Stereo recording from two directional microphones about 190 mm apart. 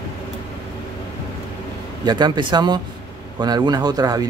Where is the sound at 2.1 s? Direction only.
20° right (ahead or behind).